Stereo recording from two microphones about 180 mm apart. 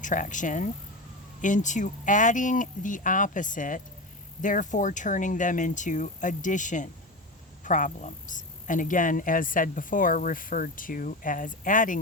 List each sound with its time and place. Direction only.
0.0 s speech: 45° left (ahead or behind)